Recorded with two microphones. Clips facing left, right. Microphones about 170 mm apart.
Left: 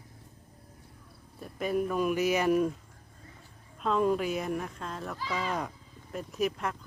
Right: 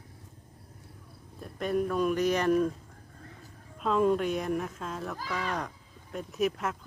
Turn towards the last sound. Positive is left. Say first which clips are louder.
# right 1 dB
turn(degrees=0)  # may be behind; listen again after turning